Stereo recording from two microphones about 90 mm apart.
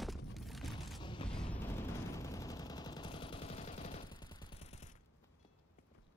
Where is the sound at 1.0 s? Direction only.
70° left (ahead or behind).